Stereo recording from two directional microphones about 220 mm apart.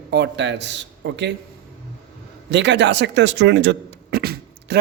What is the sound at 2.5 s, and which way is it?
Speech, 55° right (ahead or behind).